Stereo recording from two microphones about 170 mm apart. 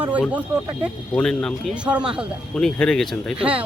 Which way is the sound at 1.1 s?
5° left (ahead or behind).